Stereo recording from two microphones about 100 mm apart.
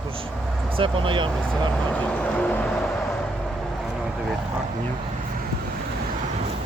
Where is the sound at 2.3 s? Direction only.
10° left (ahead or behind).